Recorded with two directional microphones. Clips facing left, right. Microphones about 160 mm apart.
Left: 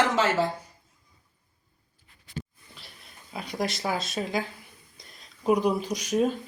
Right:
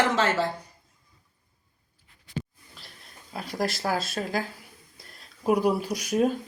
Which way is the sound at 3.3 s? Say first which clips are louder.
Right 1 dB; centre (ahead or behind).